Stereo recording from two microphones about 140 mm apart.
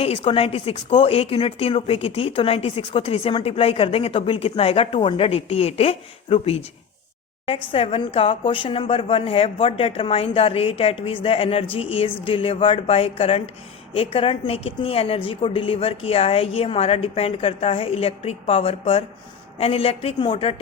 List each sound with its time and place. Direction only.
0.0 s speech: 45° left (ahead or behind)
20.1 s speech: 35° left (ahead or behind)